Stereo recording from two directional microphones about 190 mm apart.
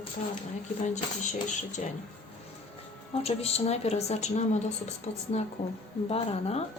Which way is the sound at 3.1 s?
35° left (ahead or behind).